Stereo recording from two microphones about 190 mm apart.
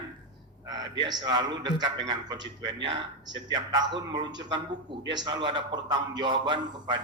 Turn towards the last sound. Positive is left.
turn(degrees=-25)  # may be behind; listen again after turning